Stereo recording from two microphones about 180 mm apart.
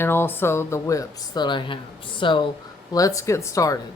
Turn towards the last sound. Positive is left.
turn(degrees=15)  # may be behind; listen again after turning